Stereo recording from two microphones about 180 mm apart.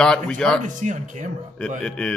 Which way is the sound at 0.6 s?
45° right (ahead or behind).